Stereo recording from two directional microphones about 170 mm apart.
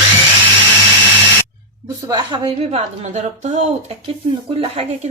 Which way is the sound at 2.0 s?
25° right (ahead or behind).